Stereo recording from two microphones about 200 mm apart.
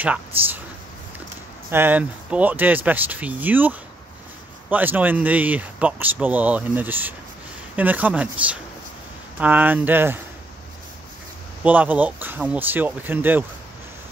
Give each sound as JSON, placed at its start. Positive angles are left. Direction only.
{"t": 0.0, "sound": "speech", "side_deg": -10}
{"t": 1.7, "sound": "speech", "side_deg": -10}
{"t": 11.6, "sound": "speech", "side_deg": -10}